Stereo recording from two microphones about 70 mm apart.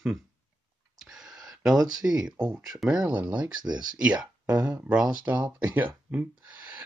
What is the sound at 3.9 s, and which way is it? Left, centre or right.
Speech, centre.